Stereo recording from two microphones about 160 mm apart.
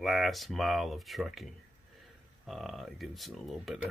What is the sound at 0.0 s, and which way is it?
Speech, centre (ahead or behind).